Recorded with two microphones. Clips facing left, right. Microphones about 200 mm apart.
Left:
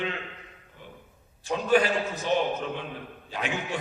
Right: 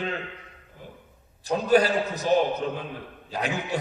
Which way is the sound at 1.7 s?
40° right (ahead or behind).